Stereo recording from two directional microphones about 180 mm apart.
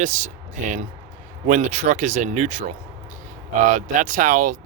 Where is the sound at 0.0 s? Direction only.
45° right (ahead or behind).